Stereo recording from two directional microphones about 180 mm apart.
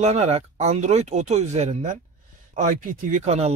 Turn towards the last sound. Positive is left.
turn(degrees=-35)  # may be behind; listen again after turning